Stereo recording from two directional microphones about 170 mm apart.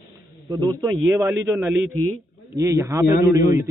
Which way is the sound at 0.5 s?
25° right (ahead or behind).